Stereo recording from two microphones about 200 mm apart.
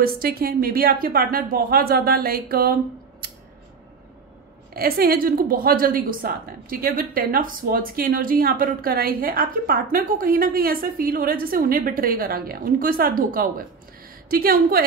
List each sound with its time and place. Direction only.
0.0 s a woman's voice: 50° right (ahead or behind)
4.7 s a woman's voice: 50° right (ahead or behind)